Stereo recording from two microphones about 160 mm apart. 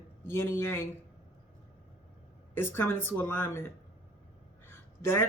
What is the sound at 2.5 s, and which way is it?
Speech, 15° left (ahead or behind).